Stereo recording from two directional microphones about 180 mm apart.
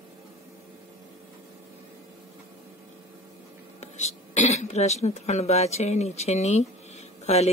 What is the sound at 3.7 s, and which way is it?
Speech, 40° left (ahead or behind).